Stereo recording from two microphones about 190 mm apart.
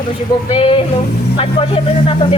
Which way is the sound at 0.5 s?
30° left (ahead or behind).